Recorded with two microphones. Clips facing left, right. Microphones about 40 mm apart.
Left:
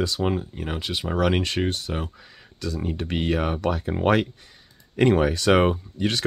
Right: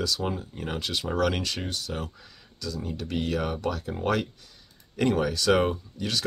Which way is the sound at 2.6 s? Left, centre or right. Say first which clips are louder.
Left 5 dB; left.